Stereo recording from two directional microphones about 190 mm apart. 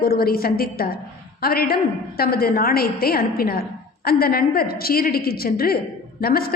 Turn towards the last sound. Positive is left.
turn(degrees=50)  # may be behind; listen again after turning